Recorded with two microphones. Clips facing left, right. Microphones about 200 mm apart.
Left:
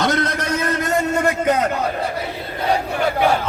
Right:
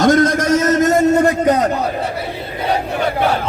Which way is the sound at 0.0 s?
45° right (ahead or behind).